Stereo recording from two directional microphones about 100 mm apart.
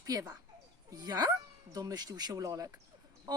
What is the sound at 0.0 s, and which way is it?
Speech, 40° right (ahead or behind).